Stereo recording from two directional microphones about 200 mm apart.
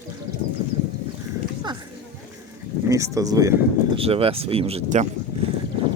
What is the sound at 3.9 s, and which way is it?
Speech, 30° right (ahead or behind).